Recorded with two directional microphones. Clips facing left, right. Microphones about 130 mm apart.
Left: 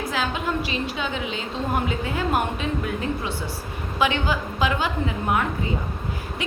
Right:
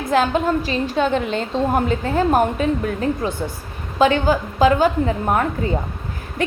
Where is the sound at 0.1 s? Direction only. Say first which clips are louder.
Right 12 dB; 45° right (ahead or behind).